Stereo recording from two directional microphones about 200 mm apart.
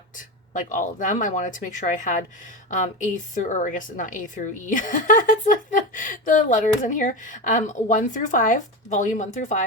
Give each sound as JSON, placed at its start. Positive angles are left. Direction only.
{"t": 0.2, "sound": "a woman's voice", "side_deg": 40}